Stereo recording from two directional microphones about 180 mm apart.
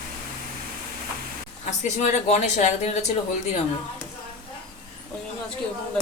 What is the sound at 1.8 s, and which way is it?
Speech, 40° left (ahead or behind).